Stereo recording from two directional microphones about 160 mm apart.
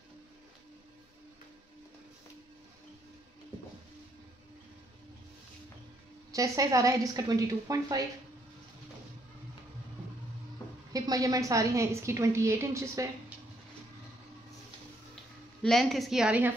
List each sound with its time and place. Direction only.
6.3 s a woman's voice: 20° right (ahead or behind)
10.9 s a woman's voice: 20° right (ahead or behind)
15.6 s a woman's voice: centre (ahead or behind)